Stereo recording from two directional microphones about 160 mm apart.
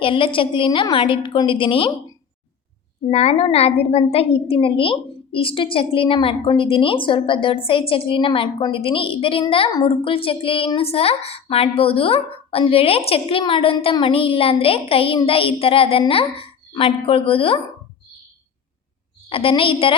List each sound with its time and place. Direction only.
0.0 s a woman's voice: 30° left (ahead or behind)
3.1 s a woman's voice: 45° left (ahead or behind)
19.3 s a woman's voice: 35° left (ahead or behind)